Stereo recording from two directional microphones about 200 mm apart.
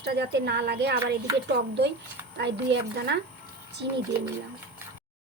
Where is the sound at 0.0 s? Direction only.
55° right (ahead or behind).